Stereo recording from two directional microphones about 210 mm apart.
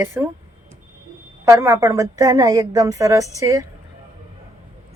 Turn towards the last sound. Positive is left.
turn(degrees=-15)  # may be behind; listen again after turning